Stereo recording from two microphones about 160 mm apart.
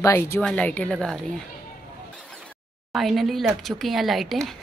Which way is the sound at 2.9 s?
Centre (ahead or behind).